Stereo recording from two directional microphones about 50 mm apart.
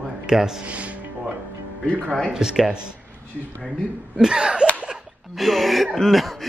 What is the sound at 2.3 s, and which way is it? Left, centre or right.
Speech, centre.